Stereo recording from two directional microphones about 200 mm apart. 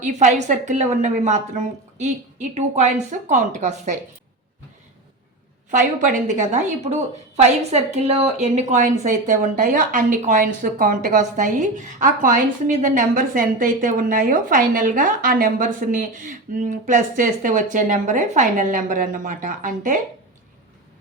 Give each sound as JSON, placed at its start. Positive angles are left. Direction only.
{"t": 0.0, "sound": "a woman's voice", "side_deg": -35}
{"t": 5.7, "sound": "a woman's voice", "side_deg": -40}